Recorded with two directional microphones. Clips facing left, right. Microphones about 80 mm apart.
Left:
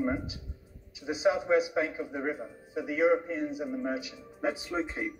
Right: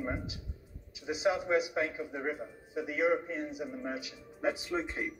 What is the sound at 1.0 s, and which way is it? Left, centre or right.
A man's voice, left.